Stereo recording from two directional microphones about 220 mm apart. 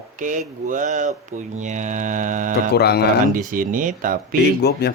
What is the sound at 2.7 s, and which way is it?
Speech, 45° left (ahead or behind).